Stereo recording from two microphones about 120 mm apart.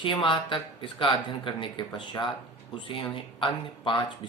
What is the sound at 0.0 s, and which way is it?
Speech, 40° left (ahead or behind).